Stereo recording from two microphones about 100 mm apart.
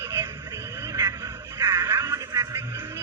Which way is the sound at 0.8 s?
30° right (ahead or behind).